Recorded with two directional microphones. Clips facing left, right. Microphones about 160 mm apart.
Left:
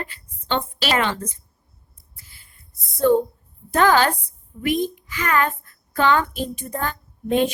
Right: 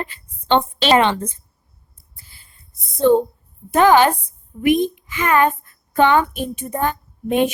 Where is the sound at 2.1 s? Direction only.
30° right (ahead or behind).